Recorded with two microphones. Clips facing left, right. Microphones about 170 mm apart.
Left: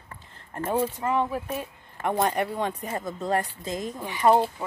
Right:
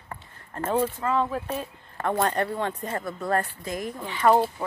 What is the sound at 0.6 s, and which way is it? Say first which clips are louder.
Speech: right 1 dB; 10° left (ahead or behind).